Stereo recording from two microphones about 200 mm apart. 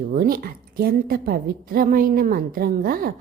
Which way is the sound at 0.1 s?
45° right (ahead or behind).